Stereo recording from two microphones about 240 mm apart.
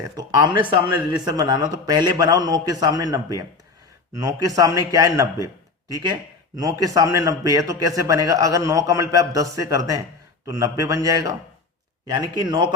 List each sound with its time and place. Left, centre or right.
0.0 s a man's voice: centre